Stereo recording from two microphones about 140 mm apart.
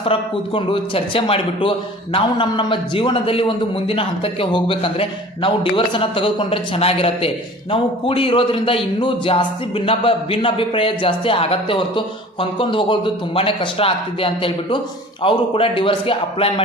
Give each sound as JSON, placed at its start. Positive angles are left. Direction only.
{"t": 0.0, "sound": "a man's voice", "side_deg": 40}